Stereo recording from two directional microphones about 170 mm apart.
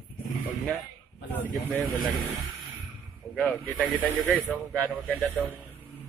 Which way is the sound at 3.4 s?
10° left (ahead or behind).